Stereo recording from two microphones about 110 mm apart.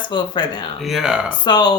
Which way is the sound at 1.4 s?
40° left (ahead or behind).